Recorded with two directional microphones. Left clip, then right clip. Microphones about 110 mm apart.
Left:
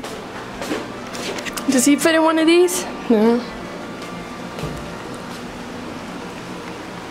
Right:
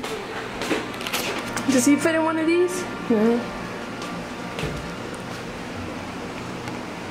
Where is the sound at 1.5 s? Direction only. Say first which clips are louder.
Left 3 dB; 15° left (ahead or behind).